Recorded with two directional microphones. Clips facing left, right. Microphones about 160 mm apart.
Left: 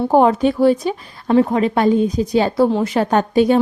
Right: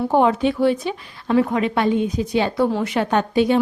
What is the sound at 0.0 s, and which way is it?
Speech, 40° left (ahead or behind).